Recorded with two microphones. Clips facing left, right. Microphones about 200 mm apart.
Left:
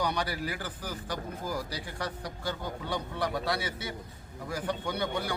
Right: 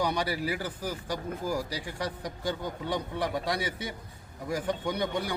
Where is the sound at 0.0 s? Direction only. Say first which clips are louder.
Right 2 dB; 10° right (ahead or behind).